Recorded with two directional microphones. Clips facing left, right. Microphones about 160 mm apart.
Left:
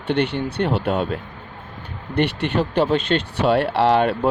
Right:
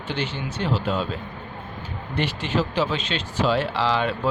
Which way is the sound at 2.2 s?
60° left (ahead or behind).